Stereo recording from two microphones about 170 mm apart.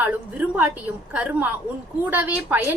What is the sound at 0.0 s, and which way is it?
A woman's voice, 10° right (ahead or behind).